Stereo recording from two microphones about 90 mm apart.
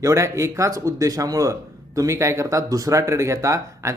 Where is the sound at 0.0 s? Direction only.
35° right (ahead or behind).